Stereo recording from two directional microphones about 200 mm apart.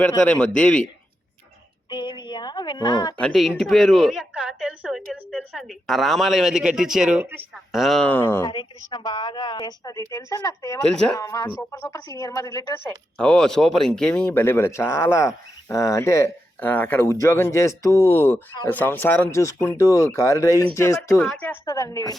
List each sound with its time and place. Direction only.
0.3 s a woman's voice: 5° left (ahead or behind)
1.9 s a sound: 20° left (ahead or behind)
3.2 s a woman's voice: centre (ahead or behind)
10.8 s a woman's voice: 5° left (ahead or behind)
11.2 s speech: 15° left (ahead or behind)
13.1 s speech: 5° left (ahead or behind)
21.7 s speech: 15° left (ahead or behind)